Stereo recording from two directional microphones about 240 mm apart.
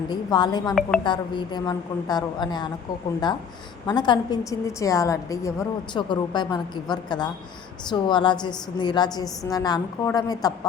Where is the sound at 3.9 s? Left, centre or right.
Centre.